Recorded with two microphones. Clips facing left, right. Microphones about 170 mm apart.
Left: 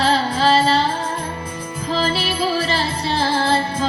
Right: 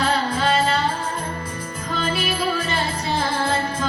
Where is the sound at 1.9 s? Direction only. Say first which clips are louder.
Left 3 dB; 30° left (ahead or behind).